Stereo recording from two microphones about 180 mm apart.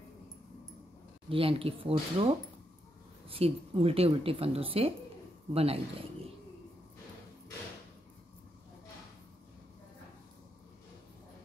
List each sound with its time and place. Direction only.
1.3 s speech: 30° right (ahead or behind)
3.3 s speech: 30° right (ahead or behind)